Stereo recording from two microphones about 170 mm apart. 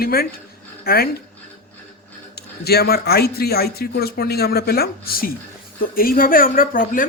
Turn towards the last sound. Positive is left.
turn(degrees=55)  # may be behind; listen again after turning